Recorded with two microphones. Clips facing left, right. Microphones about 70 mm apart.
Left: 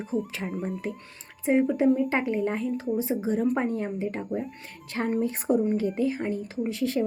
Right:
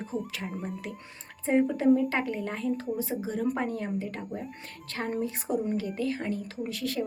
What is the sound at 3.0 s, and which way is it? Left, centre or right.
Speech, left.